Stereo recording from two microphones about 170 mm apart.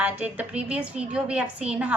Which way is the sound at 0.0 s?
10° right (ahead or behind).